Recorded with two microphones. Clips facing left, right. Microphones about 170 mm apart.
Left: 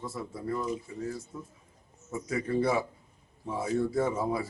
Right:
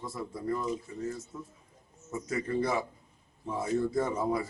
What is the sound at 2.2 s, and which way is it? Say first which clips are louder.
A man's voice: left 3 dB; 10° left (ahead or behind).